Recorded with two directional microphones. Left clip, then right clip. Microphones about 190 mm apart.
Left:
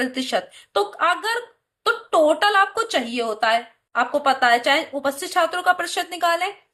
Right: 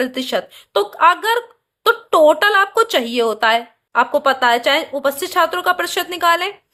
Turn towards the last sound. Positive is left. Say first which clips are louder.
# right 5 dB
turn(degrees=-45)  # may be behind; listen again after turning